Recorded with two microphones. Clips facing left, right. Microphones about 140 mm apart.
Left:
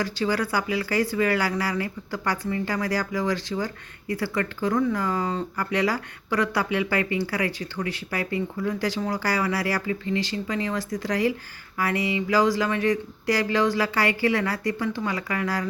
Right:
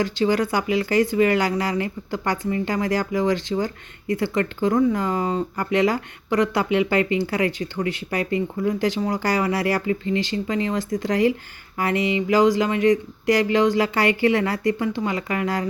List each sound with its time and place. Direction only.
0.0 s speech: 20° right (ahead or behind)